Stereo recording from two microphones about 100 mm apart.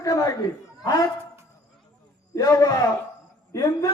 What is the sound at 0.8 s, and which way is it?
Speech, 40° left (ahead or behind).